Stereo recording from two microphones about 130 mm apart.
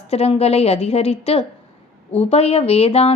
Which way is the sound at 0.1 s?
50° left (ahead or behind).